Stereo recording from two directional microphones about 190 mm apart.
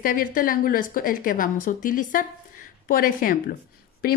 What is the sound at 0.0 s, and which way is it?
A woman's voice, 45° left (ahead or behind).